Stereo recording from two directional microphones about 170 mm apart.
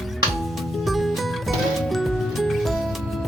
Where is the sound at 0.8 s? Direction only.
Centre (ahead or behind).